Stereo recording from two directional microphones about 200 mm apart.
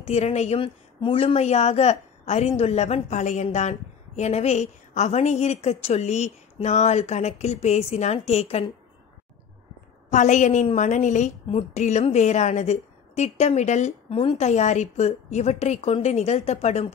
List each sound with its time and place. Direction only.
0.0 s a woman's voice: 35° left (ahead or behind)
10.1 s a woman's voice: 35° left (ahead or behind)